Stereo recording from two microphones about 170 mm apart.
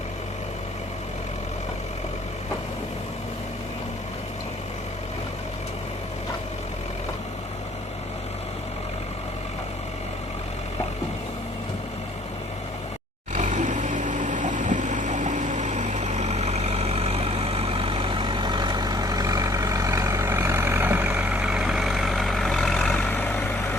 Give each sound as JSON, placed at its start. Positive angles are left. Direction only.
{"t": 13.3, "sound": "vehicle", "side_deg": -45}